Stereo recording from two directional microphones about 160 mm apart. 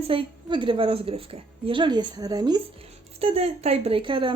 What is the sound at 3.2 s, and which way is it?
A woman's voice, 40° right (ahead or behind).